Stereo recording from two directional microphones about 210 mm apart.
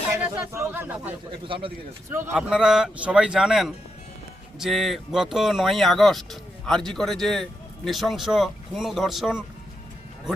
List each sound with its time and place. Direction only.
0.2 s speech: 10° right (ahead or behind)
1.5 s speech: 25° right (ahead or behind)
2.3 s speech: centre (ahead or behind)